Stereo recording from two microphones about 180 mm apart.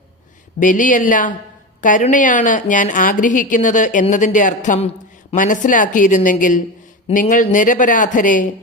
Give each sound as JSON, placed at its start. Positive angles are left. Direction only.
{"t": 0.6, "sound": "a woman's voice", "side_deg": 45}